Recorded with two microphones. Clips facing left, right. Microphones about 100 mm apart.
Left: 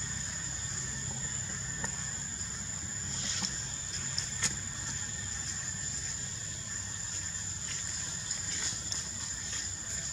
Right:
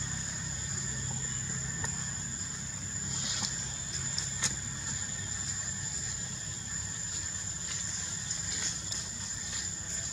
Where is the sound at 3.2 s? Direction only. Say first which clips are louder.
Left 1 dB; 15° right (ahead or behind).